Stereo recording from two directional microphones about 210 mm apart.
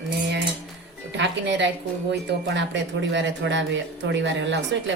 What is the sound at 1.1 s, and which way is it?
A woman's voice, 55° right (ahead or behind).